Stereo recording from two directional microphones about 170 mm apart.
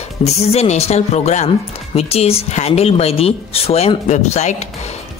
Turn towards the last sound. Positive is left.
turn(degrees=40)  # may be behind; listen again after turning